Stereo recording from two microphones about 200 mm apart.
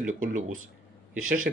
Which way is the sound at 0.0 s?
40° right (ahead or behind).